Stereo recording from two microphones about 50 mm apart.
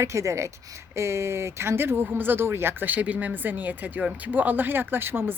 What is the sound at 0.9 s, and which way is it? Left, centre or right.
Speech, right.